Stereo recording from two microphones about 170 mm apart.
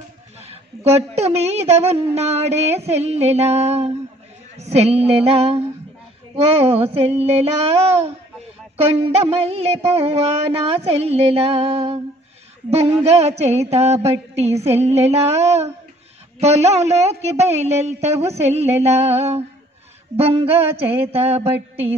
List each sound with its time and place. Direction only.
0.5 s a woman's voice: 40° right (ahead or behind)
8.9 s a woman's voice: 35° right (ahead or behind)